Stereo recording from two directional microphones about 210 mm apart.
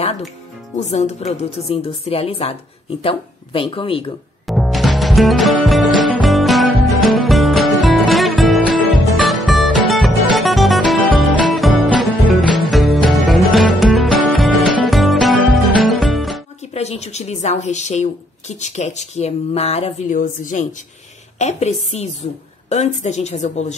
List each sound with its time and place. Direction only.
0.7 s a woman's voice: 30° left (ahead or behind)
4.5 s music: centre (ahead or behind)
16.7 s speech: 30° left (ahead or behind)